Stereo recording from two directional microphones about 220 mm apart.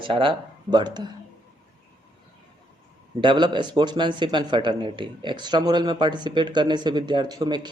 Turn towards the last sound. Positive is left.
turn(degrees=-20)  # may be behind; listen again after turning